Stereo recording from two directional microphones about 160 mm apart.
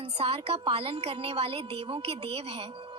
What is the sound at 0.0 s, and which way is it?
Speech, 35° right (ahead or behind).